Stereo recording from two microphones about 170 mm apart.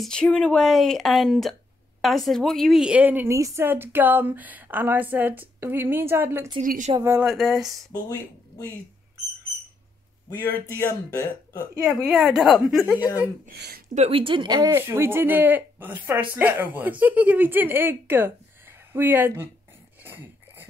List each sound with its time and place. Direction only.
0.0 s speech: 5° left (ahead or behind); by 6.5 s 15° right (ahead or behind)
6.6 s speech: 55° right (ahead or behind)
7.0 s speech: 15° right (ahead or behind)
7.2 s a woman's voice: centre (ahead or behind)
11.8 s a woman's voice: 5° right (ahead or behind)
12.9 s speech: 20° left (ahead or behind)
13.5 s speech: 65° right (ahead or behind)
13.9 s speech: 35° right (ahead or behind); by 19.5 s 10° right (ahead or behind)
20.0 s dog: 10° right (ahead or behind)